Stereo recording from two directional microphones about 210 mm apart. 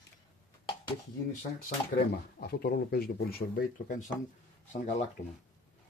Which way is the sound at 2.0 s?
45° left (ahead or behind).